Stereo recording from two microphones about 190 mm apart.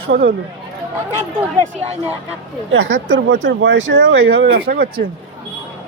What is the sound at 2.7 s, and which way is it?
Speech, 90° right.